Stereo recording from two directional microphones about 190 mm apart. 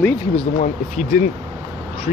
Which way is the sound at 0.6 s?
40° left (ahead or behind).